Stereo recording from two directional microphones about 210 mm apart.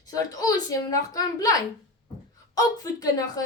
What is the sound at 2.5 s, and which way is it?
Speech, 15° left (ahead or behind).